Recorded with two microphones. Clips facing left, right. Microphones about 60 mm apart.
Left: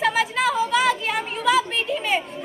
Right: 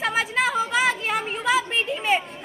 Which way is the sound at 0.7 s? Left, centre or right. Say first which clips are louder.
Left 2 dB; right.